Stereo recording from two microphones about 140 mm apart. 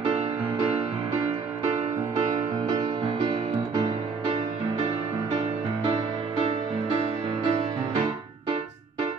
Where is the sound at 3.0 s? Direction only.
50° right (ahead or behind).